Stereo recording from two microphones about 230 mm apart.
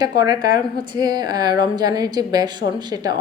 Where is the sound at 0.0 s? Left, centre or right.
Centre.